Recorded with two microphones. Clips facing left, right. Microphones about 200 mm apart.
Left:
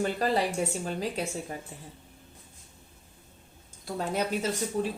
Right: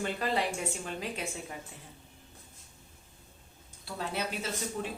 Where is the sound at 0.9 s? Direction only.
40° left (ahead or behind).